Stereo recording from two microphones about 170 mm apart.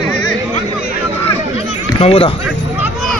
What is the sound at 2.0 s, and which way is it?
Speech, 35° left (ahead or behind).